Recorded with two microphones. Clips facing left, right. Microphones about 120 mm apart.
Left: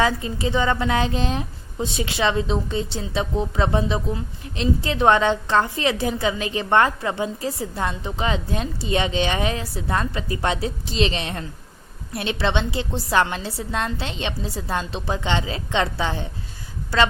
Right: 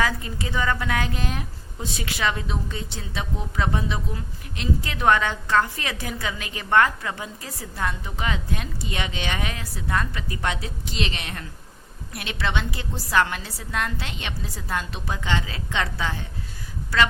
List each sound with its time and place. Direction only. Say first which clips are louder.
0.0 s a woman's voice: left 4 dB; 25° left (ahead or behind)